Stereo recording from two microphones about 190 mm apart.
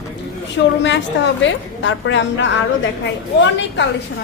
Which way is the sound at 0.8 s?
70° left (ahead or behind).